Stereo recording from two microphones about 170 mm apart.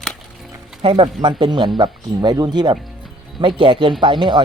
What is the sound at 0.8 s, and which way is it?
Speech, 30° right (ahead or behind).